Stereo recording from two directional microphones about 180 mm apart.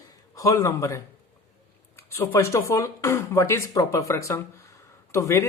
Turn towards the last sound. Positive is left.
turn(degrees=15)  # may be behind; listen again after turning